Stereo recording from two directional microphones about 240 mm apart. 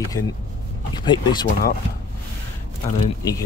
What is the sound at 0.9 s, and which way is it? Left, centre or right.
Speech, centre.